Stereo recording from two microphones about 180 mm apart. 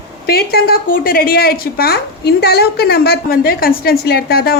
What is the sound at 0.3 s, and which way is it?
A woman's voice, 60° left (ahead or behind).